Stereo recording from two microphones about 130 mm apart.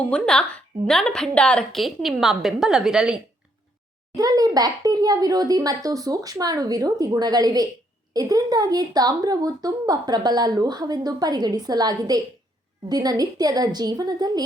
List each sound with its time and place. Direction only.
0.0 s a woman's voice: 5° left (ahead or behind)
4.1 s a child's voice: 30° right (ahead or behind)